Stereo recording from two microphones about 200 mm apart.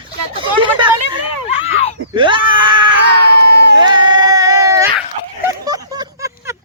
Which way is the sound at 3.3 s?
55° right (ahead or behind).